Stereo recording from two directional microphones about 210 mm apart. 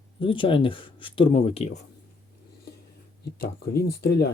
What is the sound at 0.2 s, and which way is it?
Speech, 25° left (ahead or behind).